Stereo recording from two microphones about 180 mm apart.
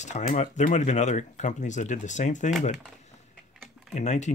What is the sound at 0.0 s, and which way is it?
Speech, 40° left (ahead or behind).